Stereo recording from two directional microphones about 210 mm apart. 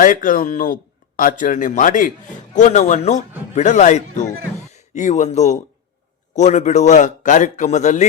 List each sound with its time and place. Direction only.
0.0 s speech: 40° left (ahead or behind)